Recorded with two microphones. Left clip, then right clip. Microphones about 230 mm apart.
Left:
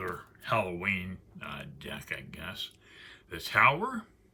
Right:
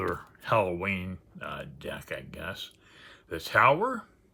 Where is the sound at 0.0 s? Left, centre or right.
Right.